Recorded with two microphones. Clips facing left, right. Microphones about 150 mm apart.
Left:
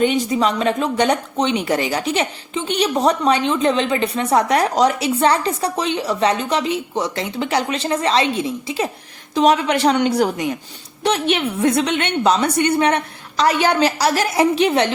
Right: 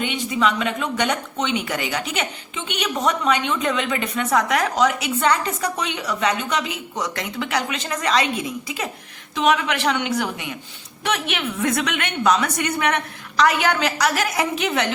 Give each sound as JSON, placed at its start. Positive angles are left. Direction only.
{"t": 0.0, "sound": "speech", "side_deg": 40}